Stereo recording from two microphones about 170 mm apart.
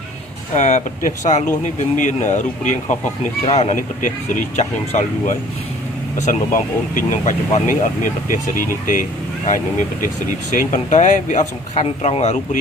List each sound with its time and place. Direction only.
0.5 s speech: 45° left (ahead or behind)
10.5 s speech: 50° left (ahead or behind)